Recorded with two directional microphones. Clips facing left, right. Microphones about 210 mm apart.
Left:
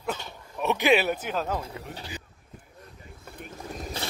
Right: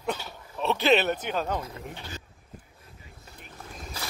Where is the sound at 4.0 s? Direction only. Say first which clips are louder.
Left 3 dB; 30° left (ahead or behind).